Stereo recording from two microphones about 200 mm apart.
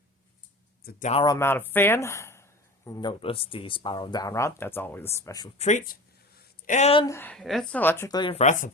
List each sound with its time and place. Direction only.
0.9 s speech: 40° left (ahead or behind)
1.2 s speech: 15° left (ahead or behind)
5.5 s speech: 35° left (ahead or behind)
7.0 s speech: 10° left (ahead or behind); by 8.7 s 35° left (ahead or behind)